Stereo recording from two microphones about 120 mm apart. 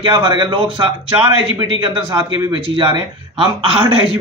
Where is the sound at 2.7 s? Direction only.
40° right (ahead or behind).